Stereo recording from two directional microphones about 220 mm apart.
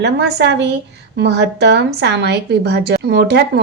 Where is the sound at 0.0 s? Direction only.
50° right (ahead or behind).